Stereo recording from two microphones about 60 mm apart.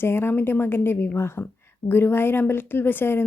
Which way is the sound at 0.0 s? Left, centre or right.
Left.